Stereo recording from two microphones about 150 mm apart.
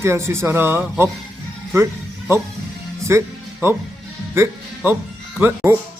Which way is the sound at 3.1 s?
15° right (ahead or behind).